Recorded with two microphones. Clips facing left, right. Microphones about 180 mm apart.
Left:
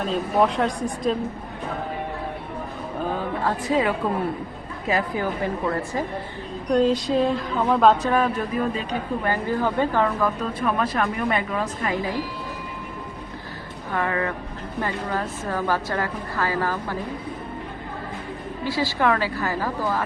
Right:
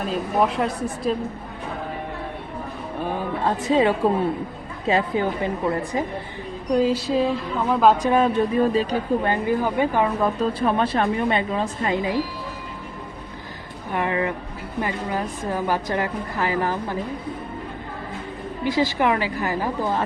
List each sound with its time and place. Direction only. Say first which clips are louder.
0.0 s a woman's voice: left 1 dB; 5° right (ahead or behind)
3.4 s speech: right 4 dB; 25° right (ahead or behind)
6.7 s a woman's voice: even; 5° right (ahead or behind)
8.1 s speech: right 4 dB; 25° right (ahead or behind)
9.3 s a woman's voice: right 2 dB; 15° right (ahead or behind)
10.2 s speech: right 3 dB; 30° right (ahead or behind)
13.9 s a woman's voice: right 2 dB; 20° right (ahead or behind)
18.6 s a woman's voice: right 2 dB; 20° right (ahead or behind)